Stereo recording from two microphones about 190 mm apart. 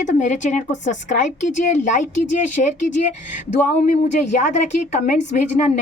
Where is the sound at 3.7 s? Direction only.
35° left (ahead or behind).